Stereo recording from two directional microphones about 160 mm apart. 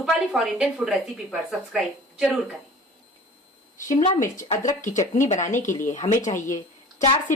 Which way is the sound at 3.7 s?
50° left (ahead or behind).